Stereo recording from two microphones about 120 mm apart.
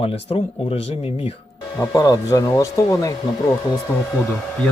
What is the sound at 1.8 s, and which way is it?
Speech, 30° left (ahead or behind).